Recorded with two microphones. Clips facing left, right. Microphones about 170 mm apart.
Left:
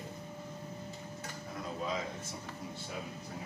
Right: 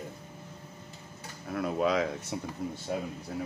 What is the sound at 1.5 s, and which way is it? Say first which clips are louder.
Speech: right 10 dB; 70° right (ahead or behind).